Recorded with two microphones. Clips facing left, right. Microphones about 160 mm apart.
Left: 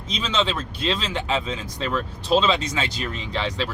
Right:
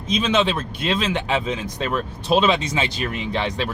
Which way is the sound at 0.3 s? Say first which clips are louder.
Right 4 dB; 15° right (ahead or behind).